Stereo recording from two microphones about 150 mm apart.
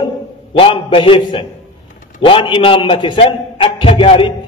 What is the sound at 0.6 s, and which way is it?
A man's voice, 35° left (ahead or behind).